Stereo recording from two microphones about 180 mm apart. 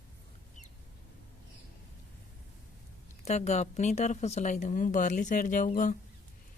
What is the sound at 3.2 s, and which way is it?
Speech, 40° left (ahead or behind).